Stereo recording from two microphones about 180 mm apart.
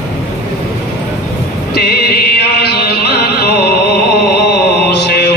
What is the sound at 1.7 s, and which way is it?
Music, 60° left (ahead or behind).